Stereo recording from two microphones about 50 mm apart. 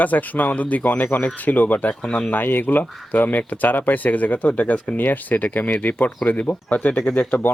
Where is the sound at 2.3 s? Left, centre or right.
Left.